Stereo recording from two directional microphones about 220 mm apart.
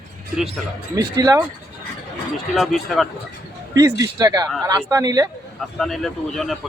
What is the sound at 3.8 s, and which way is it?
Speech, 15° right (ahead or behind).